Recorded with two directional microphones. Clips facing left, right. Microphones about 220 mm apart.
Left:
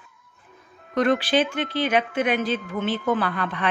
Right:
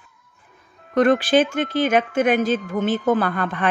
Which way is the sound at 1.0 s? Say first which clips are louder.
Right 4 dB; 50° right (ahead or behind).